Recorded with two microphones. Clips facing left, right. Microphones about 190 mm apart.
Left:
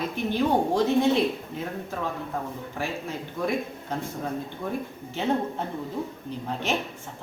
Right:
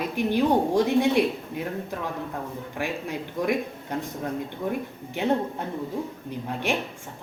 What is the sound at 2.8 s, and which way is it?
Speech, 15° right (ahead or behind).